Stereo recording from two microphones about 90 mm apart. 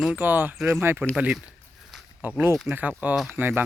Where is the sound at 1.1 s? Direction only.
5° right (ahead or behind).